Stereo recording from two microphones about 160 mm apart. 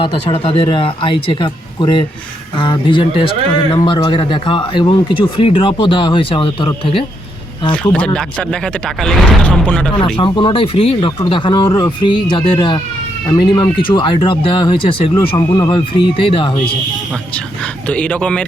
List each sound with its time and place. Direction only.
0.0 s speech: 35° left (ahead or behind)
7.9 s speech: 5° left (ahead or behind)
10.2 s speech: 30° left (ahead or behind)
17.8 s speech: 10° left (ahead or behind)